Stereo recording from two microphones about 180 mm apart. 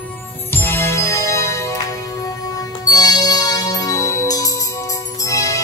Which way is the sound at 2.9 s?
20° left (ahead or behind).